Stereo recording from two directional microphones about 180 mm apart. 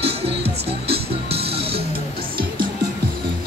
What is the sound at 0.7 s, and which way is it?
Music, 35° right (ahead or behind).